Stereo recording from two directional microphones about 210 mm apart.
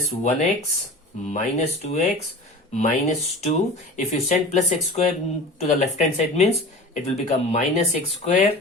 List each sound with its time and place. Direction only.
0.2 s speech: 35° left (ahead or behind)